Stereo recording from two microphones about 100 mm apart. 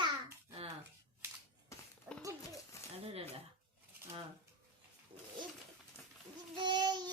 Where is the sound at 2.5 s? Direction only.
30° left (ahead or behind).